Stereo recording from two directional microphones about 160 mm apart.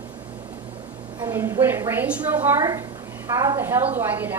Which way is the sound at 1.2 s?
20° right (ahead or behind).